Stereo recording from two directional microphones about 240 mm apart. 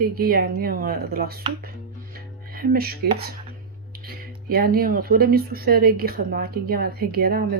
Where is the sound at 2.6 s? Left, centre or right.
Right.